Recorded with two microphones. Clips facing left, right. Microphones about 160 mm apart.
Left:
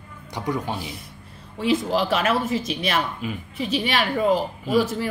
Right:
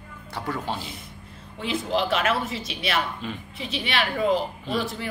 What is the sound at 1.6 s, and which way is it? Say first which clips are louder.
Speech: left 4 dB; 40° left (ahead or behind).